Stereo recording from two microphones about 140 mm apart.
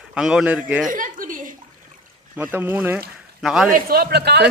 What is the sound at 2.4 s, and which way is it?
Speech, 15° right (ahead or behind).